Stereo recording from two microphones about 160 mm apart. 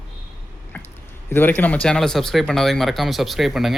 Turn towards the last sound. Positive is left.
turn(degrees=0)  # may be behind; listen again after turning